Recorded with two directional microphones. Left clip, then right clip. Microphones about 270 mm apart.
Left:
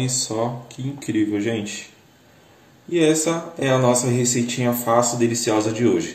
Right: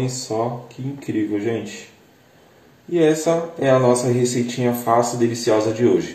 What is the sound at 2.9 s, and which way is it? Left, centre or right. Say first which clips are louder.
A man's voice: right 2 dB; left.